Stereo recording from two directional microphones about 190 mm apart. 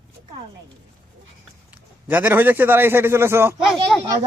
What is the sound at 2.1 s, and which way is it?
A man's voice, 10° right (ahead or behind).